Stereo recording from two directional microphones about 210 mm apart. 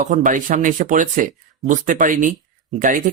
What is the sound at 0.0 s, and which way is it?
Speech, 35° right (ahead or behind).